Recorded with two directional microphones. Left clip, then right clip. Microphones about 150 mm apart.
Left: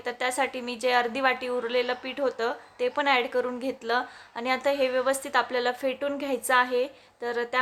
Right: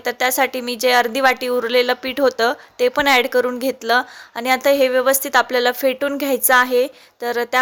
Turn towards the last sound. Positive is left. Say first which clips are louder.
# right 8 dB
turn(degrees=-35)  # may be behind; listen again after turning